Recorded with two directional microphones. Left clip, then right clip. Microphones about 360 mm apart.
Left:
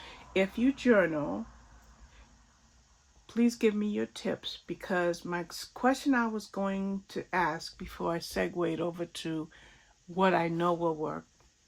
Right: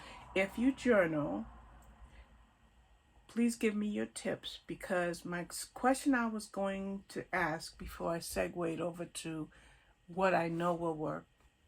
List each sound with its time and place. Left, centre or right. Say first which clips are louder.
0.3 s speech: left 4 dB; left
3.3 s speech: left 6 dB; left